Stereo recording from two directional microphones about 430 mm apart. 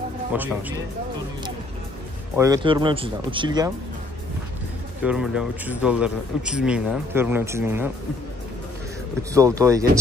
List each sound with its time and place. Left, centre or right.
0.3 s speech: centre
2.3 s speech: centre
5.0 s speech: centre
9.3 s speech: centre